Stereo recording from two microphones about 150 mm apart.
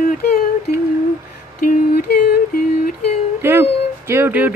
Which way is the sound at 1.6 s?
75° left (ahead or behind).